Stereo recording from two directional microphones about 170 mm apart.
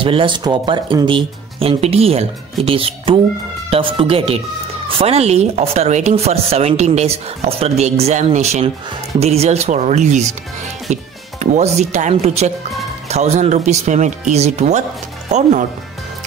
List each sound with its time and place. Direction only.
0.0 s speech: 30° right (ahead or behind)